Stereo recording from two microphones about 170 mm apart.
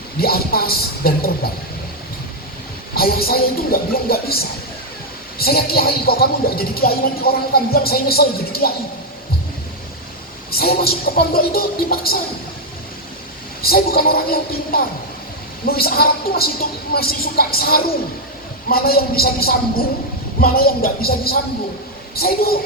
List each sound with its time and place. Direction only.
0.2 s speech: 65° left (ahead or behind)
2.9 s speech: 60° left (ahead or behind)
10.6 s speech: 65° left (ahead or behind)
13.6 s speech: 60° left (ahead or behind)